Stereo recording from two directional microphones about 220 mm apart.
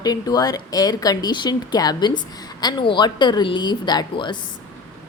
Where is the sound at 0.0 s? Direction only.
15° left (ahead or behind).